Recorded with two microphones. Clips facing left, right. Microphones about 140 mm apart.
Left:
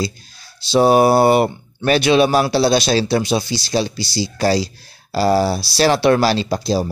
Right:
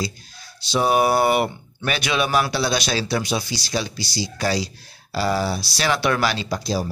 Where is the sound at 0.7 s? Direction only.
30° left (ahead or behind).